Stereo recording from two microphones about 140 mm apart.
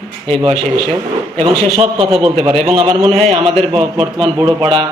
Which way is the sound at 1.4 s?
45° right (ahead or behind).